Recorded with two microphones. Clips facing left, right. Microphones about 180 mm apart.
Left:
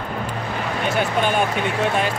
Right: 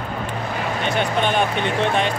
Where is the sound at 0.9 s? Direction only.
5° left (ahead or behind).